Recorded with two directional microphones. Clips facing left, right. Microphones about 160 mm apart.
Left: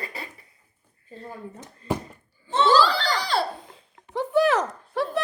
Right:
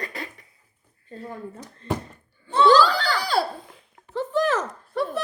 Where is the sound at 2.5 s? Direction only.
25° left (ahead or behind).